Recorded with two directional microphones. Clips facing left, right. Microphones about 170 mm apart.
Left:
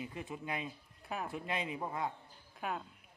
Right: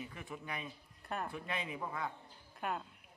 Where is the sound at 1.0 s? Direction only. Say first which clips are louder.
Even; 5° left (ahead or behind).